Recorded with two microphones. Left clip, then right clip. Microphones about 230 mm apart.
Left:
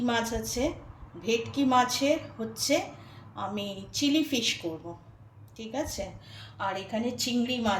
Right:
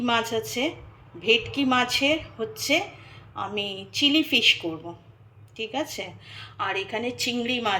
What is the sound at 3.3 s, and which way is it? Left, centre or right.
A woman's voice, centre.